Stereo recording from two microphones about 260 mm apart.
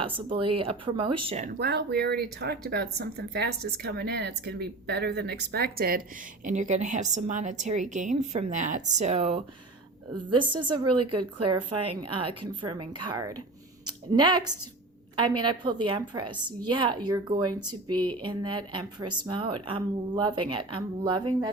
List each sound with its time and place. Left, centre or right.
0.3 s a woman's voice: right
1.5 s a woman's voice: right; by 10.4 s centre
10.6 s a woman's voice: right
11.3 s a woman's voice: centre